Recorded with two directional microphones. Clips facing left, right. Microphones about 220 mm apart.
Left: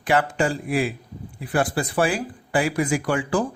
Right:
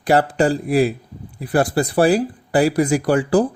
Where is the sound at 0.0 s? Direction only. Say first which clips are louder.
Right 5 dB; 35° right (ahead or behind).